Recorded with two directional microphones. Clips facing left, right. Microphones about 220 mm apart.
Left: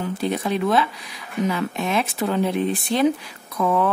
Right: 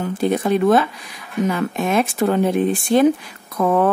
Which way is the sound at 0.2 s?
50° right (ahead or behind).